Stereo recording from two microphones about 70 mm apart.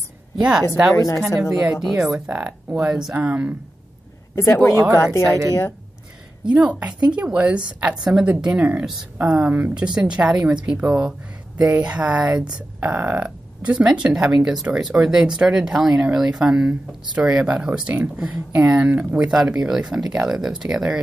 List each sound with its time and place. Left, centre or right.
0.4 s speech: centre
0.9 s speech: left
1.3 s speech: centre
2.2 s speech: centre
2.8 s speech: centre
3.2 s speech: centre
4.9 s speech: left
6.5 s speech: centre
19.1 s speech: centre